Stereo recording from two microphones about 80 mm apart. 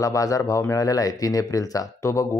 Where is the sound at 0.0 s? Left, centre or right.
Left.